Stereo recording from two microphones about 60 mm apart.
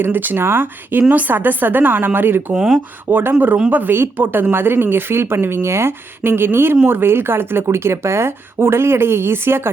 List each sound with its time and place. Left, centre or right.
0.0 s a woman's voice: right
2.5 s speech: centre
3.1 s a woman's voice: right